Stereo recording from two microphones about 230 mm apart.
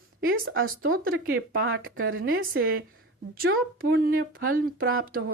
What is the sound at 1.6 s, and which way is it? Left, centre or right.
A woman's voice, right.